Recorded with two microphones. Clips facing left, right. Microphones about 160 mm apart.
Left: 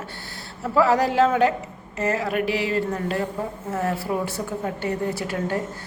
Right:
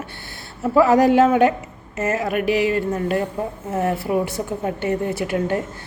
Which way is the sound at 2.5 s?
30° left (ahead or behind).